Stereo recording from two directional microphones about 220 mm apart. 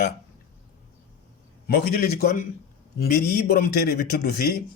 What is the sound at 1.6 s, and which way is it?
Speech, 45° left (ahead or behind).